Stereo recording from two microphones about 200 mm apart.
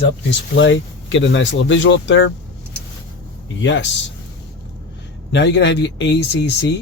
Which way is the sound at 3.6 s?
65° left (ahead or behind).